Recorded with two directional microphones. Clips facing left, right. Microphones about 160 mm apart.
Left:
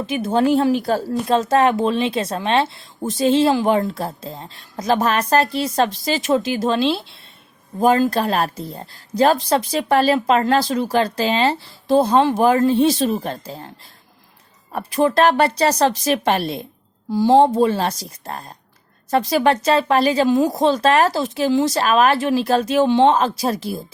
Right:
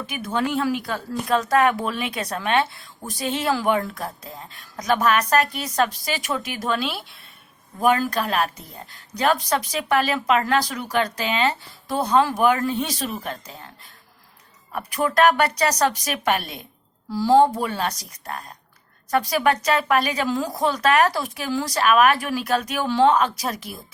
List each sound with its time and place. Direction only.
0.0 s a woman's voice: 30° left (ahead or behind)